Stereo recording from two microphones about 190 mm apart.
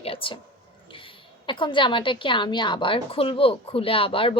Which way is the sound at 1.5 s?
25° left (ahead or behind).